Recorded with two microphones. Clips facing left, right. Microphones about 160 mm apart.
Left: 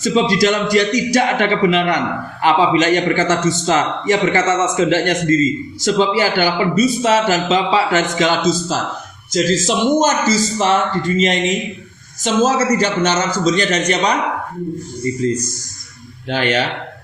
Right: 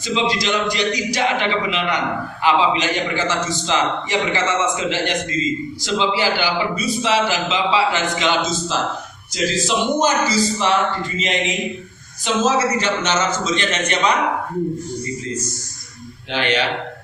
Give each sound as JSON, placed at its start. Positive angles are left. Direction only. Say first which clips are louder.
{"t": 0.0, "sound": "a man's voice", "louder": "left 6 dB", "side_deg": 45}
{"t": 12.2, "sound": "a man's voice", "louder": "left 3 dB", "side_deg": 40}
{"t": 16.3, "sound": "a man's voice", "louder": "left 3 dB", "side_deg": 45}